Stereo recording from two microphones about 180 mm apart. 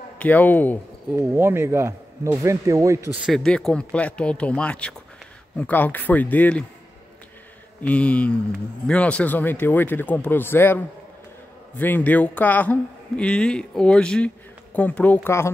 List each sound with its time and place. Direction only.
0.2 s a man's voice: 10° left (ahead or behind)
1.1 s speech: 15° right (ahead or behind)
3.2 s a man's voice: centre (ahead or behind)
7.8 s a man's voice: 5° left (ahead or behind)